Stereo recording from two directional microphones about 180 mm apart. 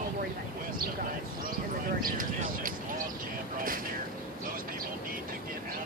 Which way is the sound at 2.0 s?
50° right (ahead or behind).